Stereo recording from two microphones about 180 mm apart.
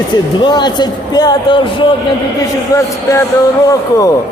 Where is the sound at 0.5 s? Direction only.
25° left (ahead or behind).